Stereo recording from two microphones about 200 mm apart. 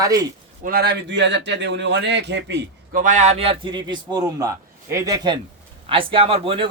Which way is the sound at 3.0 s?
35° right (ahead or behind).